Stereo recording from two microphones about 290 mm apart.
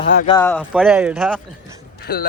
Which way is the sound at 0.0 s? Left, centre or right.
Left.